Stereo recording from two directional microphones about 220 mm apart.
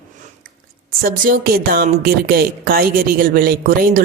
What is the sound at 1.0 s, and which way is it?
A woman's voice, 40° right (ahead or behind).